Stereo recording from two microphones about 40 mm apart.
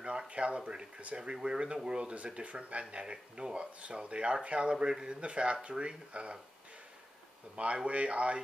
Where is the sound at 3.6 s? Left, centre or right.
Right.